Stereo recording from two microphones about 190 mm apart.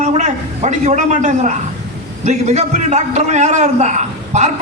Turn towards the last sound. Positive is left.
turn(degrees=-40)  # may be behind; listen again after turning